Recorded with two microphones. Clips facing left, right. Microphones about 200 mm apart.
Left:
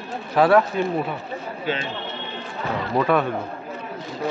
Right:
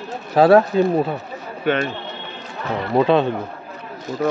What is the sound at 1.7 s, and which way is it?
Speech, 60° right (ahead or behind).